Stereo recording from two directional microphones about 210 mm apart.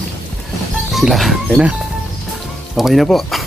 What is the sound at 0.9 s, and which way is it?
Speech, centre (ahead or behind).